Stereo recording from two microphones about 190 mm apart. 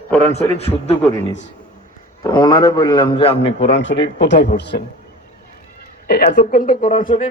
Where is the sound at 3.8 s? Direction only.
75° left (ahead or behind).